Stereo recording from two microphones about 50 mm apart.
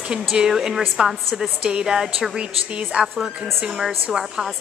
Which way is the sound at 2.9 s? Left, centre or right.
Right.